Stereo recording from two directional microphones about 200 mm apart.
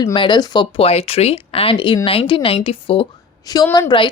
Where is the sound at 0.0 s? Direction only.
25° left (ahead or behind).